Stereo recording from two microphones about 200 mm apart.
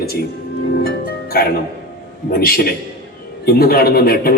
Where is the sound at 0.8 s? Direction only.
50° left (ahead or behind).